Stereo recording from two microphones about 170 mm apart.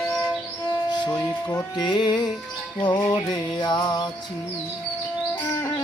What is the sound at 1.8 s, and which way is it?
Music, 25° left (ahead or behind).